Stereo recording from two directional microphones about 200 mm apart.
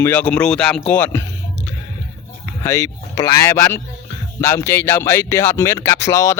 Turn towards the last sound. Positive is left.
turn(degrees=15)  # may be behind; listen again after turning